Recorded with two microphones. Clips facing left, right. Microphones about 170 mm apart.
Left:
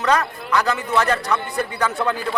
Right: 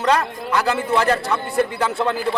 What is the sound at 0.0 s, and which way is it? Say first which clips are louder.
Speech: right 1 dB; 30° right (ahead or behind).